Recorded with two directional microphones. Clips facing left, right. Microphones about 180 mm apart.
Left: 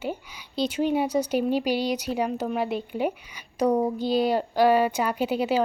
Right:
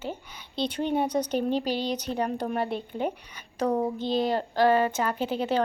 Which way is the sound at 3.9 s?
20° right (ahead or behind).